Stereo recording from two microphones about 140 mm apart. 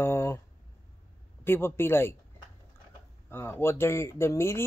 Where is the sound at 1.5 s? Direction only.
15° left (ahead or behind).